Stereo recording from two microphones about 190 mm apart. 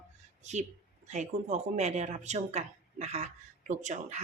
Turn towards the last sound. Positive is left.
turn(degrees=-40)  # may be behind; listen again after turning